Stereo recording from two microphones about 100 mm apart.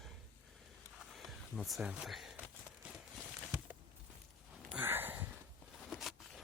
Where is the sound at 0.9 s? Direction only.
Centre (ahead or behind).